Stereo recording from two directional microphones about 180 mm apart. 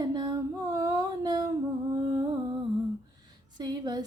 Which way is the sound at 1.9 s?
20° right (ahead or behind).